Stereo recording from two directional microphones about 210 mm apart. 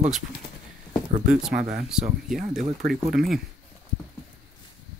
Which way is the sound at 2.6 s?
40° right (ahead or behind).